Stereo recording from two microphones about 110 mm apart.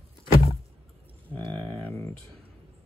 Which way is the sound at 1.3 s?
15° left (ahead or behind).